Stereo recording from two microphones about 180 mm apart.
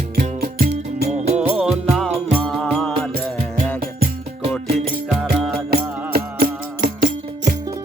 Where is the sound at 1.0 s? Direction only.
40° right (ahead or behind).